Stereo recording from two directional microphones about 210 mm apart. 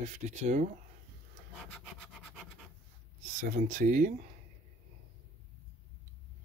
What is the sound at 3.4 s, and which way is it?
Speech, 40° right (ahead or behind).